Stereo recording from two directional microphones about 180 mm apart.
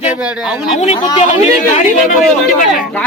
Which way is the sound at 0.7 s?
40° left (ahead or behind).